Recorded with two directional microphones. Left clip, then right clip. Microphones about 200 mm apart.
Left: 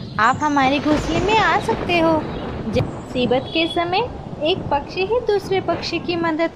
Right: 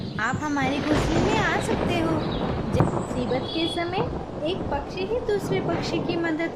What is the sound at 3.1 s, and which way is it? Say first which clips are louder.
A woman's voice: left 7 dB; 20° left (ahead or behind).